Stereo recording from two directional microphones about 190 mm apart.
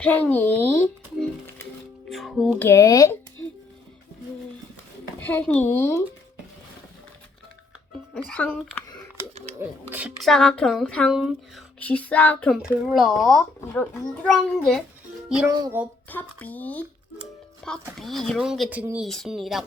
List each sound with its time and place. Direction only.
0.0 s speech: 10° left (ahead or behind)
2.0 s speech: centre (ahead or behind)
2.6 s speech: 15° left (ahead or behind)
5.2 s speech: 10° left (ahead or behind)
8.1 s speech: 5° left (ahead or behind)
9.6 s speech: 10° right (ahead or behind)
10.2 s speech: 5° left (ahead or behind)
12.6 s speech: 5° right (ahead or behind)
15.4 s music: 20° right (ahead or behind)
16.0 s speech: 10° left (ahead or behind)